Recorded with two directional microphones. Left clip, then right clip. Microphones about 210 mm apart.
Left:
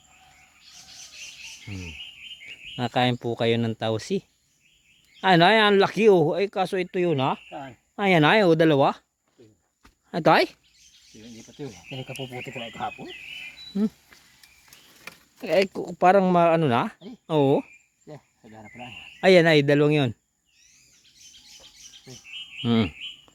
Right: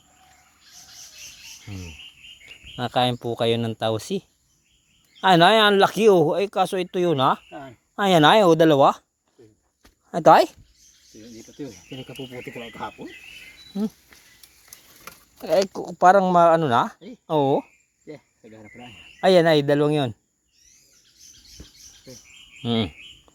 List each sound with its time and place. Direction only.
1.6 s bird: 5° left (ahead or behind)
2.7 s speech: 10° left (ahead or behind)
10.1 s speech: 10° left (ahead or behind)
15.4 s speech: 10° left (ahead or behind)
19.2 s speech: 15° left (ahead or behind)
22.6 s bird: 20° left (ahead or behind)